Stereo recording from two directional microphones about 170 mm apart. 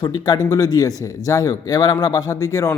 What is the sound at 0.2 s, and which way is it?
Speech, 20° left (ahead or behind).